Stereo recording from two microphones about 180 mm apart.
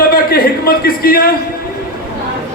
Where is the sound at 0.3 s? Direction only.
55° left (ahead or behind).